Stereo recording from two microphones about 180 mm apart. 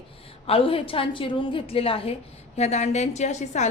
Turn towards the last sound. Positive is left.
turn(degrees=40)  # may be behind; listen again after turning